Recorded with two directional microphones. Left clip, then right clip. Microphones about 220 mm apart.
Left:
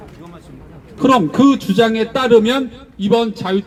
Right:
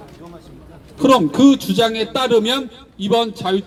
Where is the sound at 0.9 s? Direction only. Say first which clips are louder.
Even; 30° right (ahead or behind).